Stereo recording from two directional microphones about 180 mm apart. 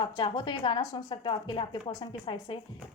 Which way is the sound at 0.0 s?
25° left (ahead or behind).